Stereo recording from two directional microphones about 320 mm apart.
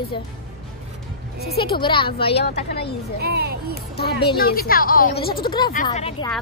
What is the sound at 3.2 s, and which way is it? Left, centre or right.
Speech, right.